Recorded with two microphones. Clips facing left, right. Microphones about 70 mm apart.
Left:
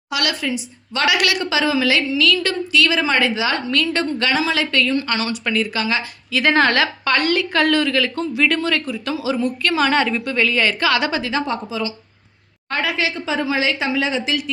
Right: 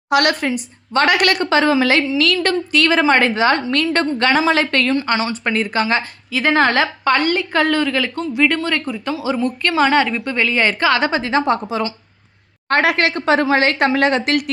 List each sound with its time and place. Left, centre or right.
0.1 s a woman's voice: right
4.9 s a woman's voice: right
6.3 s a woman's voice: right
9.9 s a woman's voice: centre
10.2 s a woman's voice: right
12.6 s speech: right